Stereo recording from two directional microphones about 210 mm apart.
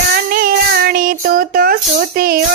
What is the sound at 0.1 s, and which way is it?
Child singing, 45° right (ahead or behind).